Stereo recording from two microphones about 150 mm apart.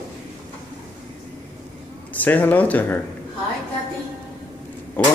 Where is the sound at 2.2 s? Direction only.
10° left (ahead or behind).